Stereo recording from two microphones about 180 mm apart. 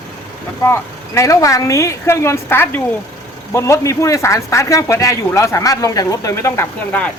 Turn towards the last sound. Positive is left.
turn(degrees=10)  # may be behind; listen again after turning